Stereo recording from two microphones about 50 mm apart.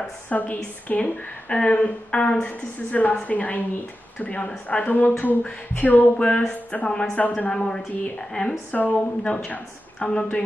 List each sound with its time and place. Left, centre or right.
0.3 s a woman's voice: left
6.2 s speech: centre
8.4 s a woman's voice: left